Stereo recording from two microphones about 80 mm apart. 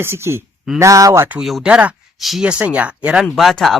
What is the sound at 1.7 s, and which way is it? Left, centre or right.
Speech, centre.